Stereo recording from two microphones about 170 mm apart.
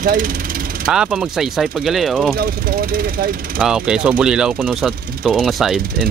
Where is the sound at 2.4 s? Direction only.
60° right (ahead or behind).